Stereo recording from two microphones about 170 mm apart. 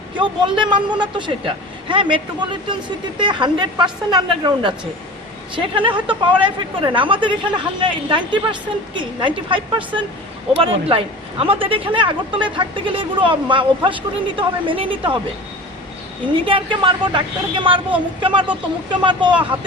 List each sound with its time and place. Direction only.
0.2 s speech: 30° right (ahead or behind)
16.5 s speech: 30° right (ahead or behind)